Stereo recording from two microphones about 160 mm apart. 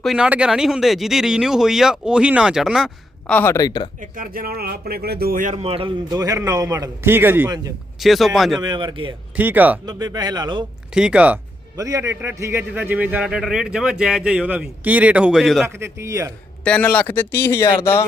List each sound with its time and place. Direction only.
0.0 s speech: 5° right (ahead or behind)
3.3 s speech: 15° left (ahead or behind)
4.0 s speech: 60° right (ahead or behind)
5.6 s speech: 35° right (ahead or behind)
6.1 s a man's voice: 20° right (ahead or behind)
7.9 s speech: centre (ahead or behind)
8.6 s a man's voice: 30° right (ahead or behind)
9.3 s a man's voice: 10° right (ahead or behind)
9.8 s a man's voice: 25° right (ahead or behind)
10.9 s a man's voice: 5° right (ahead or behind)
11.8 s a man's voice: 20° right (ahead or behind); by 15.6 s centre (ahead or behind)
15.6 s a man's voice: 15° right (ahead or behind)
16.6 s speech: 10° left (ahead or behind)